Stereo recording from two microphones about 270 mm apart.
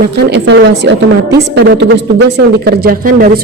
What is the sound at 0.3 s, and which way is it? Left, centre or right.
Speech, right.